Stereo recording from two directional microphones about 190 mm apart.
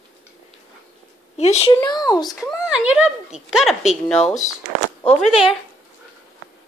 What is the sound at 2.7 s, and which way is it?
Speech, 5° right (ahead or behind).